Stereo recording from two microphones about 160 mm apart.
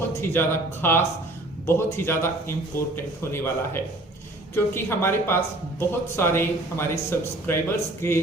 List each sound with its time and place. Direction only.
0.2 s a man's voice: 15° left (ahead or behind)